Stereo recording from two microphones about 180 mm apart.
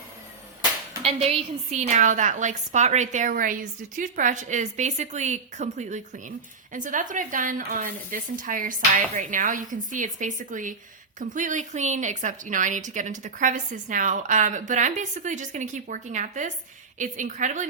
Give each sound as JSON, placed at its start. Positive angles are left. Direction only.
{"t": 1.0, "sound": "a woman's voice", "side_deg": -35}